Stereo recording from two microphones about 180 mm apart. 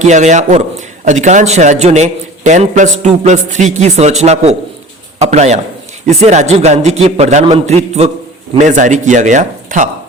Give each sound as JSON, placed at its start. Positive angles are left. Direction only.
{"t": 0.0, "sound": "a man's voice", "side_deg": -40}